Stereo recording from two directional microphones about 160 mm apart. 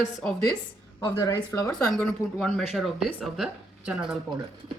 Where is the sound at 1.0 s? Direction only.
20° left (ahead or behind).